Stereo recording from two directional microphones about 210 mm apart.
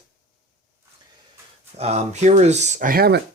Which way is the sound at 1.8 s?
30° right (ahead or behind).